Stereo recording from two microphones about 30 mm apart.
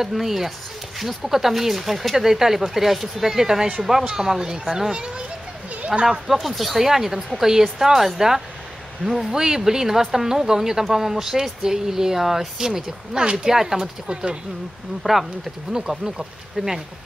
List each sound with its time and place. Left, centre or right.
0.0 s speech: centre
4.9 s a child's voice: right
5.9 s speech: centre
6.8 s speech: centre
9.3 s speech: centre
13.2 s speech: right
13.5 s speech: centre
15.0 s speech: centre
15.7 s speech: right